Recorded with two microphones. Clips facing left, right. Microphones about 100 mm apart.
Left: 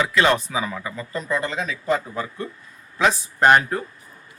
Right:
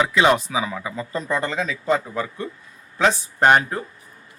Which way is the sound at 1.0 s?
30° right (ahead or behind).